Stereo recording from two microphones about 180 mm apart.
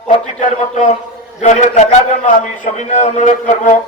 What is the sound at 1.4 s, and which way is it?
A man's voice, 40° left (ahead or behind).